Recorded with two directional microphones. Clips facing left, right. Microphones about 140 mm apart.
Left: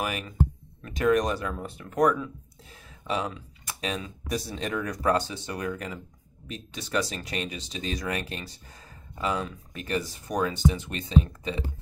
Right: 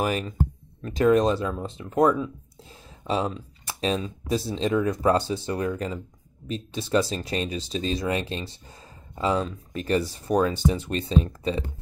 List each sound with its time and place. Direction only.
0.0 s speech: 30° right (ahead or behind)